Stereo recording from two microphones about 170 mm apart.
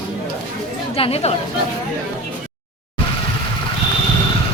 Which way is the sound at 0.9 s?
35° left (ahead or behind).